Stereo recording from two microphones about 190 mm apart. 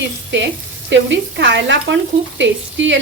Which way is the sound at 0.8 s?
70° right (ahead or behind).